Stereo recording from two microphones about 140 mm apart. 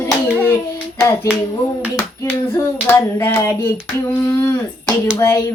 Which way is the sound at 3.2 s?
15° left (ahead or behind).